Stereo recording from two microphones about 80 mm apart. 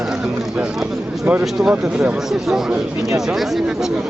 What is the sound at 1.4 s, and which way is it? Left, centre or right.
Speech, centre.